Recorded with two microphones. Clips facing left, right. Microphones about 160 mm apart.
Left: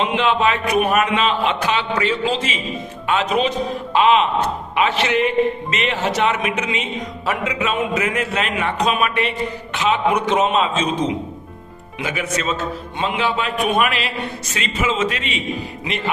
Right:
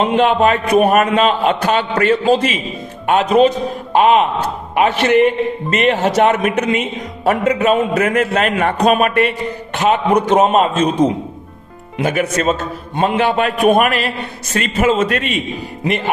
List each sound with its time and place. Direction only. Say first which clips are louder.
0.0 s a man's voice: right 5 dB; 45° right (ahead or behind)
11.9 s a man's voice: right 7 dB; 55° right (ahead or behind)